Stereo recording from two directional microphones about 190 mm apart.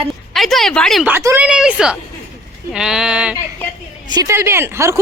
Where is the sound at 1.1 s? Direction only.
10° right (ahead or behind).